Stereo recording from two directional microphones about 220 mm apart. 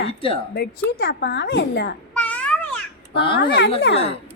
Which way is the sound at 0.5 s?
45° left (ahead or behind).